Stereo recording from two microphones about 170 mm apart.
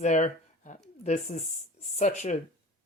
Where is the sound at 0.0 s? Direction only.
45° left (ahead or behind).